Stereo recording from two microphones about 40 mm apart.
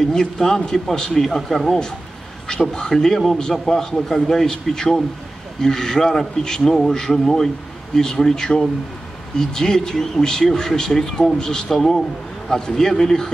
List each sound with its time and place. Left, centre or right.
0.1 s speech: centre